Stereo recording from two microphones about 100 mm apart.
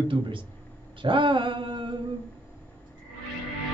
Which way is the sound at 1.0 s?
55° right (ahead or behind).